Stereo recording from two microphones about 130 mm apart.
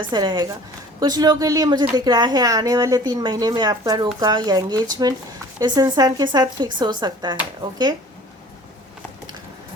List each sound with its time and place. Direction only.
0.1 s speech: 35° right (ahead or behind)